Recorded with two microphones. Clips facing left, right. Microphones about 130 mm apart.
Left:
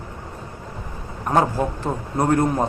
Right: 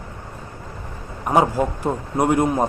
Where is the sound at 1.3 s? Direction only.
15° right (ahead or behind).